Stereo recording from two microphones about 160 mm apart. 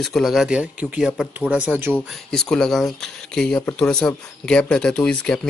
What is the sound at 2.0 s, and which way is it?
Speech, 5° left (ahead or behind).